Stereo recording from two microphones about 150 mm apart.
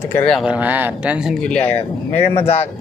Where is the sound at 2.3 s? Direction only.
40° left (ahead or behind).